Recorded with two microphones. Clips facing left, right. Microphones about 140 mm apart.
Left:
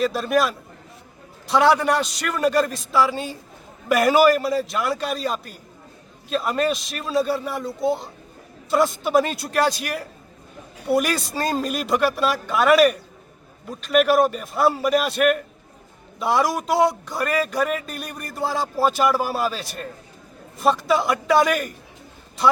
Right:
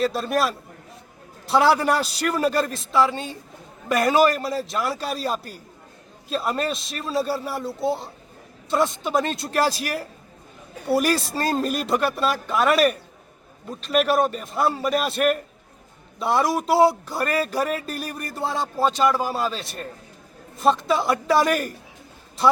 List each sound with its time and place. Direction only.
0.0 s speech: centre (ahead or behind)
2.1 s a man's voice: 35° right (ahead or behind)
2.5 s speech: centre (ahead or behind)
17.8 s a man's voice: 35° right (ahead or behind)
18.2 s speech: centre (ahead or behind)
20.8 s speech: centre (ahead or behind)